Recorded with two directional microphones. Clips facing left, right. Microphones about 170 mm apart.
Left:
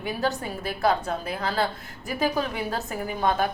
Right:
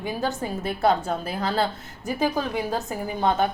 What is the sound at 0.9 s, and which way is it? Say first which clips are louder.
Speech: right 2 dB; 30° right (ahead or behind).